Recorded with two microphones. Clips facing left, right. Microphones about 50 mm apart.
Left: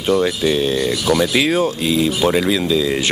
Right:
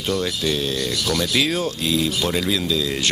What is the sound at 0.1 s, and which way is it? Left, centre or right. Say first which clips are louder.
Speech: left 7 dB; centre.